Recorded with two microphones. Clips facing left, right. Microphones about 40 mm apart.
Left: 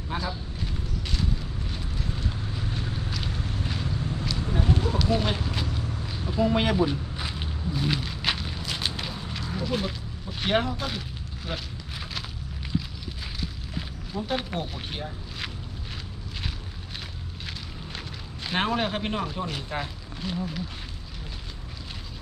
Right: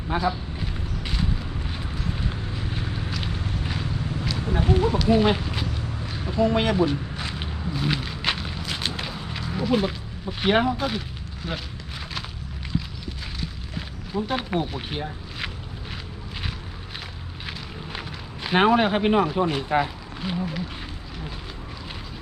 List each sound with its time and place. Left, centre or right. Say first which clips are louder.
0.1 s eruption: right 7 dB; right
3.2 s vehicle: right 2 dB; centre
4.4 s a sound: right 5 dB; right; by 5.8 s centre
6.3 s speech: right 2 dB; centre
7.7 s a sound: right 1 dB; centre
9.6 s speech: right 7 dB; centre
14.1 s speech: right 4 dB; centre
18.4 s speech: right 7 dB; centre